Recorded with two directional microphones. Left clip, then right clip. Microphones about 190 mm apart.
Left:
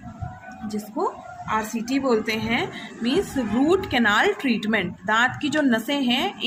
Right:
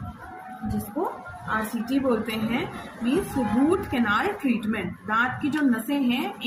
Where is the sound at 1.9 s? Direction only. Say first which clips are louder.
Left 3 dB; 45° left (ahead or behind).